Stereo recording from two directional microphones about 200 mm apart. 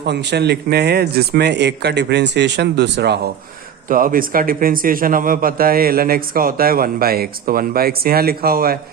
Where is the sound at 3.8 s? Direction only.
45° right (ahead or behind).